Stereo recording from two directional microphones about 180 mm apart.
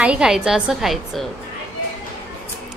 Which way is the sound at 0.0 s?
5° right (ahead or behind).